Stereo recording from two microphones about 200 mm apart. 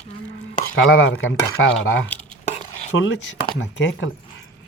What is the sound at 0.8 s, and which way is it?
Speech, 65° left (ahead or behind).